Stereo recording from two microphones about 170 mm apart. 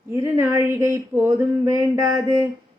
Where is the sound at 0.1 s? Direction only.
15° right (ahead or behind).